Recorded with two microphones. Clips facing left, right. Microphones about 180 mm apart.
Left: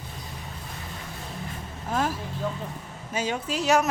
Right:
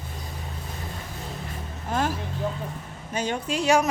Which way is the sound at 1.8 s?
Centre (ahead or behind).